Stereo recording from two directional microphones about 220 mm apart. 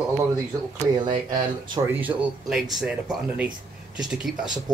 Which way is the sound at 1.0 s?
20° right (ahead or behind).